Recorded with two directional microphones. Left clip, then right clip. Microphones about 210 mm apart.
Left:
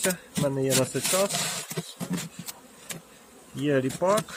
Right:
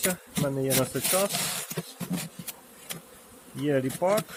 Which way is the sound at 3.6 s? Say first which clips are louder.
Left 1 dB; 15° left (ahead or behind).